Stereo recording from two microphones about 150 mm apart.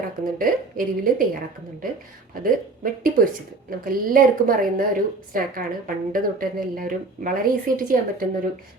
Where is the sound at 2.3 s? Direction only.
70° right (ahead or behind).